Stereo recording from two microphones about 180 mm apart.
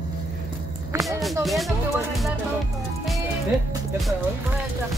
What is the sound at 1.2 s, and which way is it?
Speech, centre (ahead or behind).